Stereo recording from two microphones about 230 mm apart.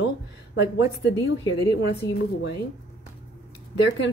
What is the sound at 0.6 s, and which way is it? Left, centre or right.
Speech, left.